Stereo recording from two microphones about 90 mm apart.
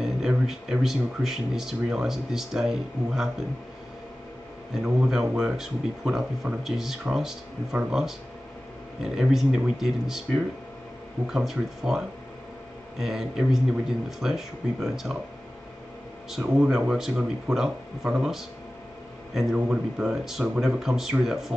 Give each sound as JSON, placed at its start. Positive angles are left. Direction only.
{"t": 0.0, "sound": "speech", "side_deg": -5}
{"t": 4.8, "sound": "speech", "side_deg": -5}
{"t": 13.0, "sound": "speech", "side_deg": -5}
{"t": 16.3, "sound": "speech", "side_deg": -5}
{"t": 16.6, "sound": "speech", "side_deg": -15}
{"t": 19.5, "sound": "speech", "side_deg": -10}